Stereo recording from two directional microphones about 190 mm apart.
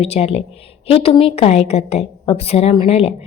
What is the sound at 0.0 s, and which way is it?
A woman's voice, 30° left (ahead or behind).